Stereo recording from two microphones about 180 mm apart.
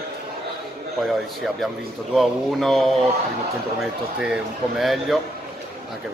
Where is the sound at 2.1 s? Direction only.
Centre (ahead or behind).